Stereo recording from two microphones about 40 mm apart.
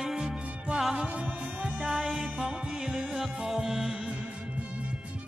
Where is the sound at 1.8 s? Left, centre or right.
Centre.